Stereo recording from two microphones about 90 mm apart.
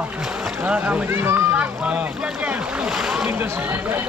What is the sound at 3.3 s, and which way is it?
Speech, 20° right (ahead or behind).